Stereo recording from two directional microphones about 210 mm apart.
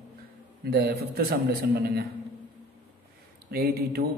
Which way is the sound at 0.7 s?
45° right (ahead or behind).